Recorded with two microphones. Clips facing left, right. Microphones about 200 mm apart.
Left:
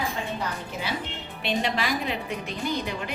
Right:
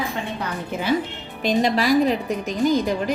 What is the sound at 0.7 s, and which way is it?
Speech, 55° right (ahead or behind).